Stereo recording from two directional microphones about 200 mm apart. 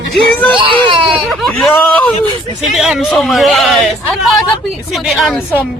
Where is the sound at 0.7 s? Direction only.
25° right (ahead or behind).